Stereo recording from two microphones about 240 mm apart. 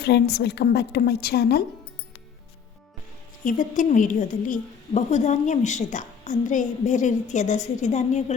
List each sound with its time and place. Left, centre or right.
0.0 s a woman's voice: left
3.4 s a woman's voice: left